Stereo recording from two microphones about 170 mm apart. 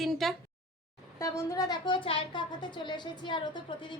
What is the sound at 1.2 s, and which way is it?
A woman's voice, 20° left (ahead or behind).